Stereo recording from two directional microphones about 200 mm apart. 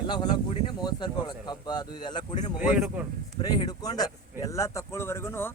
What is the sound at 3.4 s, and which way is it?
Speech, 20° left (ahead or behind).